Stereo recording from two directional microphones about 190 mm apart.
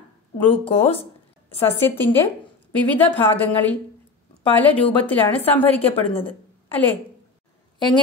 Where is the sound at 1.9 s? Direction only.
10° left (ahead or behind).